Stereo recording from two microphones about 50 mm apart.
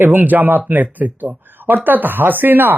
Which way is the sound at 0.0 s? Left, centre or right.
Right.